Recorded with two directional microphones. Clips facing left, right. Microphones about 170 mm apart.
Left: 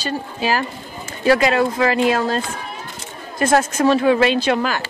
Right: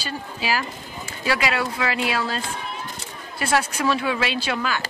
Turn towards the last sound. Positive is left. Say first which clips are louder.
# left 7 dB
turn(degrees=45)  # may be behind; listen again after turning